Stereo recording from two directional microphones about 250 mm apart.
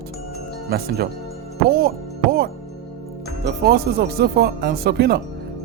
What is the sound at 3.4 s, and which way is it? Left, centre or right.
Speech, right.